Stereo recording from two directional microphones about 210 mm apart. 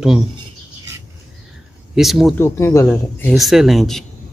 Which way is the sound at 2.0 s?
Centre (ahead or behind).